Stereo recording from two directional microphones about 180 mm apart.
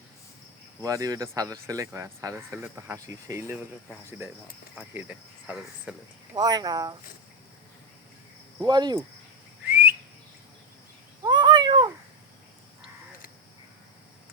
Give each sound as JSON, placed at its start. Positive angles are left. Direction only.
{"t": 0.8, "sound": "speech", "side_deg": -20}
{"t": 4.7, "sound": "speech", "side_deg": -5}
{"t": 6.3, "sound": "speech", "side_deg": -20}
{"t": 8.6, "sound": "speech", "side_deg": -25}
{"t": 9.6, "sound": "whistling", "side_deg": -10}
{"t": 11.2, "sound": "cat", "side_deg": -25}